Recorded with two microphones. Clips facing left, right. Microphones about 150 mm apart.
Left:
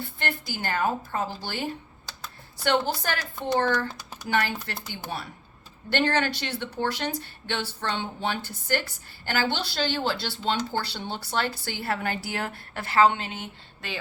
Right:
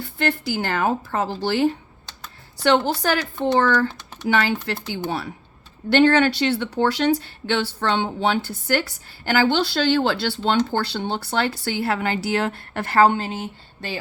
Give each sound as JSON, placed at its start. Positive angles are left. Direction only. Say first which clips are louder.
{"t": 0.0, "sound": "a woman's voice", "louder": "right 8 dB", "side_deg": -80}
{"t": 2.6, "sound": "a woman's voice", "louder": "right 6 dB", "side_deg": -85}